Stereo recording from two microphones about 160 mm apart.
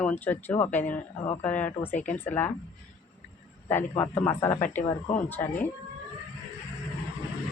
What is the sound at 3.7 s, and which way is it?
Speech, 15° left (ahead or behind).